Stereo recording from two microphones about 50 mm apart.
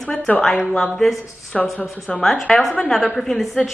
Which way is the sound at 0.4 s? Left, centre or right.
Centre.